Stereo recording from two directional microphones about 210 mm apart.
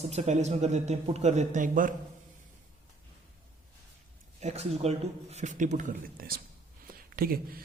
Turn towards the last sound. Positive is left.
turn(degrees=-45)  # may be behind; listen again after turning